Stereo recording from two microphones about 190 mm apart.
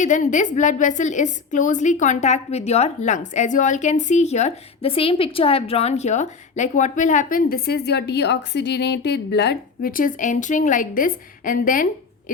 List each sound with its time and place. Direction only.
0.0 s a woman's voice: 40° left (ahead or behind)